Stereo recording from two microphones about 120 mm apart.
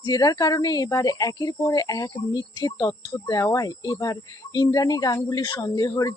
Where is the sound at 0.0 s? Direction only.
30° left (ahead or behind).